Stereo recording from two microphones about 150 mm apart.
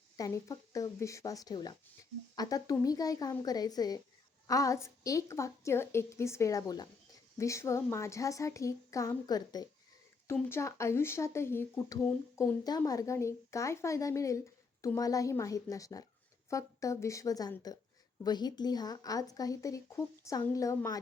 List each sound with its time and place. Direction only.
0.2 s a woman's voice: 25° left (ahead or behind)